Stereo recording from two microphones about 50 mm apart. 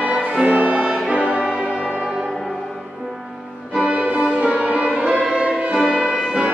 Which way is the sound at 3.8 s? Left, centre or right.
Right.